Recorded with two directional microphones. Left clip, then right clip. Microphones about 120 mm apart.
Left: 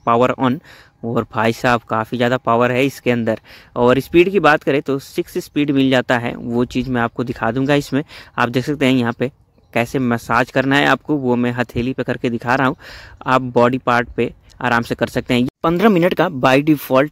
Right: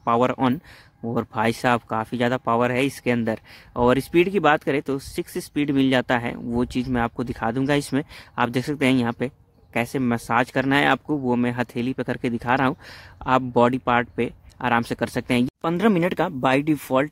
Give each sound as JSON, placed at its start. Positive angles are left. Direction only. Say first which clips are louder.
{"t": 0.0, "sound": "speech", "louder": "left 5 dB", "side_deg": 30}